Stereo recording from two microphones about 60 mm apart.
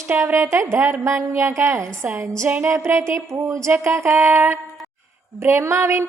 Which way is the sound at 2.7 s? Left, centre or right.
Right.